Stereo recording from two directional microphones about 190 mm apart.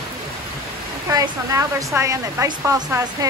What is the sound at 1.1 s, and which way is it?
Speech, 20° right (ahead or behind).